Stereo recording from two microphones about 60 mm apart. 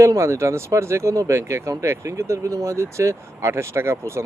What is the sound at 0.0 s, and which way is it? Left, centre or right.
Speech, right.